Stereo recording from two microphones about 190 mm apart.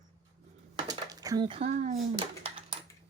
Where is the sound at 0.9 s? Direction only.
20° right (ahead or behind).